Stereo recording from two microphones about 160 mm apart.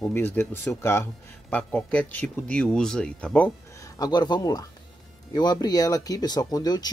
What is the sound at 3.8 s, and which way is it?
Speech, 25° left (ahead or behind).